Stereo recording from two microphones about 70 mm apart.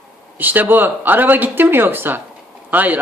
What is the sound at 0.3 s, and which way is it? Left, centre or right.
Speech, right.